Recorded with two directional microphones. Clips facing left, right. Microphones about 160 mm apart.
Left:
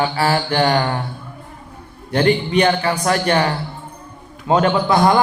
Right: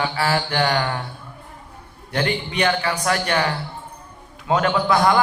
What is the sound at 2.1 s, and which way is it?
Mantra, 35° left (ahead or behind).